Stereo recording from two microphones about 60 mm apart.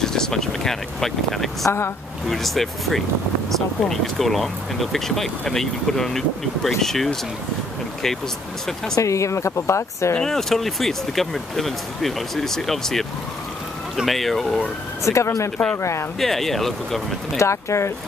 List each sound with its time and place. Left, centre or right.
0.0 s speech: centre
8.9 s speech: left
10.2 s speech: centre
14.0 s speech: centre
15.0 s speech: left
16.2 s speech: centre
17.4 s speech: left